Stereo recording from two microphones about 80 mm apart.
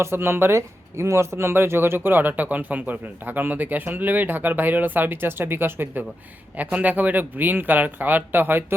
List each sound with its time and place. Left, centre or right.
0.0 s speech: right